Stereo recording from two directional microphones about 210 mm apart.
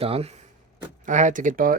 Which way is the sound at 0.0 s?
30° right (ahead or behind).